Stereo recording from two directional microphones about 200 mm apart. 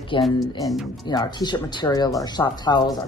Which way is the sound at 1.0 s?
20° left (ahead or behind).